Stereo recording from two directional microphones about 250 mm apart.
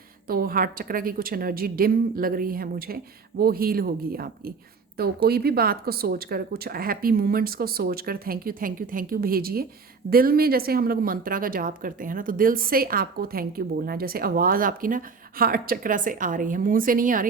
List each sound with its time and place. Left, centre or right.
0.3 s a woman's voice: right